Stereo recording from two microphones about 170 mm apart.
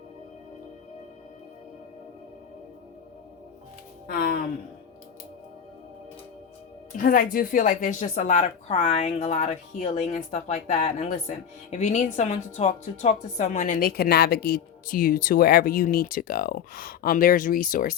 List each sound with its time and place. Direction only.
4.0 s music: 60° left (ahead or behind)
6.9 s speech: 55° left (ahead or behind)